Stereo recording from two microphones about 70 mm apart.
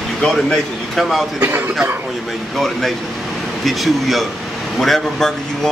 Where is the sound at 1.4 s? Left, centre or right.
Right.